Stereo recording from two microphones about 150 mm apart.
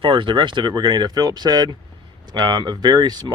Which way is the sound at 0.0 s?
35° right (ahead or behind).